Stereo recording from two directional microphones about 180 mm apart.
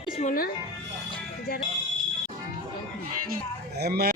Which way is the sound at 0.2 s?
50° left (ahead or behind).